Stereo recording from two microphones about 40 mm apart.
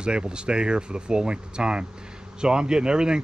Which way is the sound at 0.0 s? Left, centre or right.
Right.